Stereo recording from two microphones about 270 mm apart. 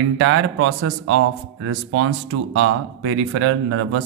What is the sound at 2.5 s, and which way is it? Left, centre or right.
Speech, right.